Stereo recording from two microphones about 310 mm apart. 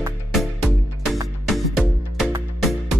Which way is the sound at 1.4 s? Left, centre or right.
Centre.